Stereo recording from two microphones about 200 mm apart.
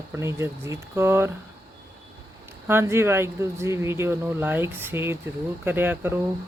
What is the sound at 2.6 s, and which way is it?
Speech, 10° right (ahead or behind).